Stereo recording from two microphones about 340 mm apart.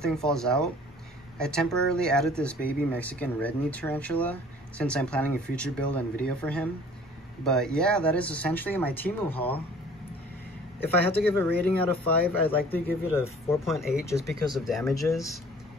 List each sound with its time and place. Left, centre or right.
0.0 s speech: centre
10.8 s speech: centre